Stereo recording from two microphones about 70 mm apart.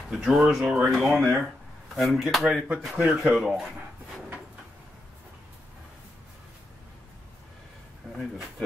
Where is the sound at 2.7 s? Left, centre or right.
Centre.